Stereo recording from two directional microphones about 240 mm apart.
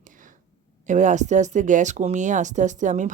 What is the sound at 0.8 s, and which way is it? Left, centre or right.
Speech, right.